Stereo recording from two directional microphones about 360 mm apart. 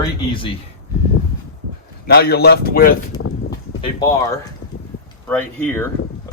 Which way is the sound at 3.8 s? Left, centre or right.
Centre.